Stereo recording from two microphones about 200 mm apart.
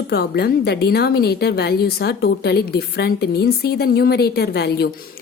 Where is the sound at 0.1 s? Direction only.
55° left (ahead or behind).